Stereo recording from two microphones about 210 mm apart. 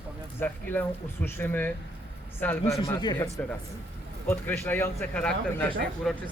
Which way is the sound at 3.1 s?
10° left (ahead or behind).